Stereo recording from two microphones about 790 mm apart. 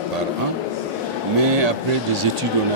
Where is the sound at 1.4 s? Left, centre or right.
Right.